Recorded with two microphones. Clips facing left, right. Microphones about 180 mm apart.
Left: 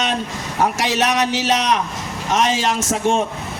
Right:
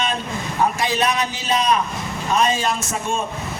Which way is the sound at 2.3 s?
90° left.